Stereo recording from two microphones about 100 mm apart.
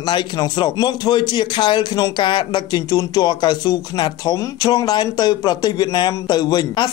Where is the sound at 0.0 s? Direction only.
45° left (ahead or behind).